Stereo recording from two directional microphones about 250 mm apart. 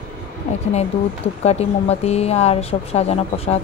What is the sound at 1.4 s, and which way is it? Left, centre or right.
Speech, left.